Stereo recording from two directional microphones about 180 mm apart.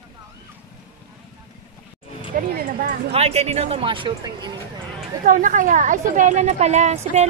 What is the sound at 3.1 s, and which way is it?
A woman's voice, 35° right (ahead or behind).